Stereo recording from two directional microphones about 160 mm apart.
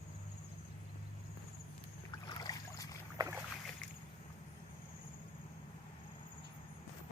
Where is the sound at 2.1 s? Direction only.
25° left (ahead or behind).